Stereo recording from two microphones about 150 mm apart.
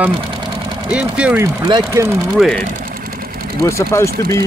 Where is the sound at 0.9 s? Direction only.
10° right (ahead or behind).